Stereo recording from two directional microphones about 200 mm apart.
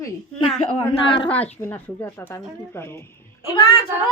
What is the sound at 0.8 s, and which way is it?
Speech, 25° left (ahead or behind).